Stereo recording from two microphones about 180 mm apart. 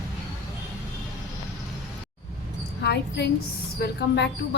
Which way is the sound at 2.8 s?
65° left (ahead or behind).